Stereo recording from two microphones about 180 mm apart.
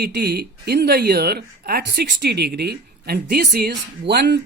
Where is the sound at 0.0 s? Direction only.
65° right (ahead or behind).